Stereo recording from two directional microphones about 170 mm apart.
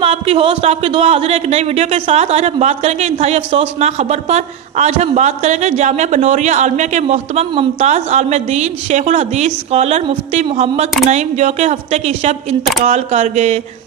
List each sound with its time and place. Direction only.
0.0 s a man's voice: 35° right (ahead or behind)